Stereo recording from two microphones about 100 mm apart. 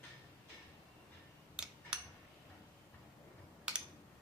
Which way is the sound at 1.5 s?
10° right (ahead or behind).